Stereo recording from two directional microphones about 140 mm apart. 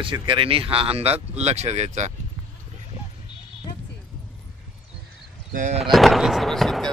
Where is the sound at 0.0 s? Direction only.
35° right (ahead or behind); by 2.1 s 55° right (ahead or behind).